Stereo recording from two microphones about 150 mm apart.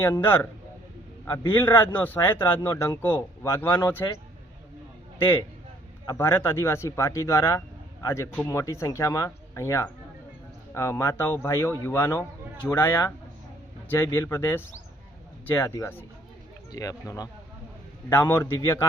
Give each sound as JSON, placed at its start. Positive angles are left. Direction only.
{"t": 0.0, "sound": "speech", "side_deg": 15}
{"t": 6.1, "sound": "speech", "side_deg": 15}